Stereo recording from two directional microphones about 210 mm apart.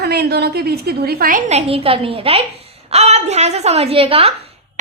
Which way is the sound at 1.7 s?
25° right (ahead or behind).